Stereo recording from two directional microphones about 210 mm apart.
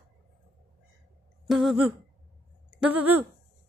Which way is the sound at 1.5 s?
Centre (ahead or behind).